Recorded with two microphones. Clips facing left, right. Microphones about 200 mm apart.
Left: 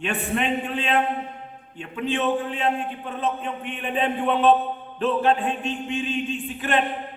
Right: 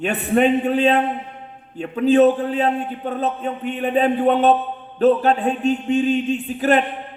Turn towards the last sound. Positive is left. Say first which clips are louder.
# right 8 dB
turn(degrees=-40)  # may be behind; listen again after turning